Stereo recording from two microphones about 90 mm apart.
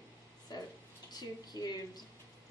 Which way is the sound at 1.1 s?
50° left (ahead or behind).